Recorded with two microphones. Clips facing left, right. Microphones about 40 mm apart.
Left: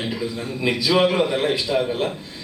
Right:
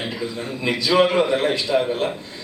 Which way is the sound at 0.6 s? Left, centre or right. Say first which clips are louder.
Right 1 dB; centre.